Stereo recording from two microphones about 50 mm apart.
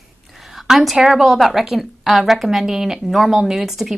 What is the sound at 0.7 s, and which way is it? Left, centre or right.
A woman's voice, centre.